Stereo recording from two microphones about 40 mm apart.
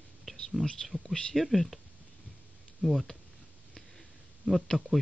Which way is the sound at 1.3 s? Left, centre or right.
Centre.